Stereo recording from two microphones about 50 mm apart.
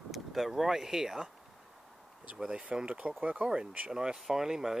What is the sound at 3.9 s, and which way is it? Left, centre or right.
Speech, centre.